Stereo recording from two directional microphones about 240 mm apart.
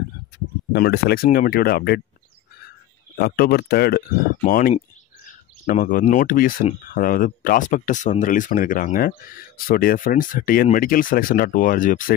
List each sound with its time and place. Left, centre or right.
0.7 s speech: left
3.2 s speech: left